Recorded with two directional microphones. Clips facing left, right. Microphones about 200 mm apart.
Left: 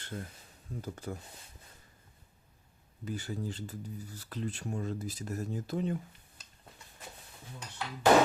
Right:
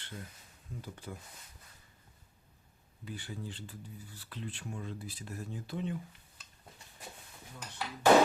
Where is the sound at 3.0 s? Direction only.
45° left (ahead or behind).